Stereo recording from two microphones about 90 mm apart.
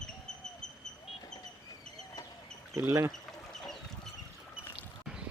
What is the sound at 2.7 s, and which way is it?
Speech, 30° right (ahead or behind).